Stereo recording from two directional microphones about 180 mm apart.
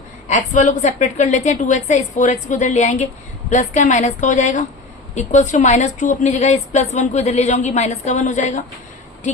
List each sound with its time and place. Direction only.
0.3 s a woman's voice: 45° left (ahead or behind)